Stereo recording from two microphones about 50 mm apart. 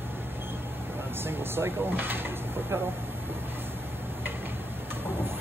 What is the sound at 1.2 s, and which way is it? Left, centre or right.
Speech, right.